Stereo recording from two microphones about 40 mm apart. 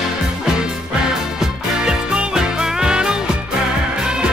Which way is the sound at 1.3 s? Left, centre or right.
Centre.